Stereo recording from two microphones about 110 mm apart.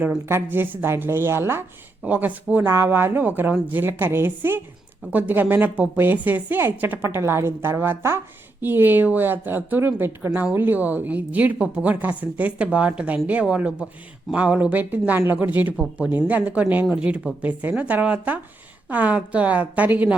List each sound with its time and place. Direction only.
0.0 s a woman's voice: 20° right (ahead or behind)